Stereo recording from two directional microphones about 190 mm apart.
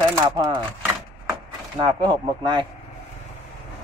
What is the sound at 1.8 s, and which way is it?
Speech, 25° right (ahead or behind).